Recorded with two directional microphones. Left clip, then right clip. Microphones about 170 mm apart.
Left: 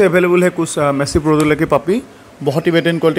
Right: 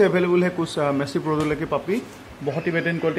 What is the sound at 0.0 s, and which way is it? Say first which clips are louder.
Speech: left 7 dB; 30° left (ahead or behind).